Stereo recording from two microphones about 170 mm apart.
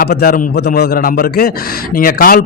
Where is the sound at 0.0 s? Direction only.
65° left (ahead or behind).